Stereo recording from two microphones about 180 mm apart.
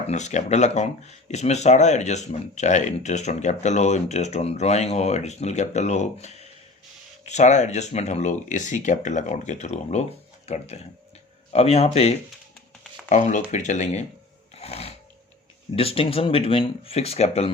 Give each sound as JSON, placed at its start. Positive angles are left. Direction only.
{"t": 0.1, "sound": "speech", "side_deg": 40}
{"t": 14.5, "sound": "a sound", "side_deg": 35}
{"t": 15.7, "sound": "speech", "side_deg": 30}